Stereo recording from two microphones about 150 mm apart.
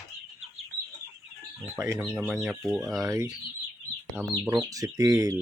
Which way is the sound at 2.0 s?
10° right (ahead or behind).